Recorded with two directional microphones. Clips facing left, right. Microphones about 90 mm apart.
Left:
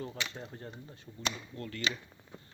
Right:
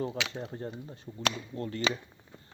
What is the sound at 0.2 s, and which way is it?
Speech, 90° right.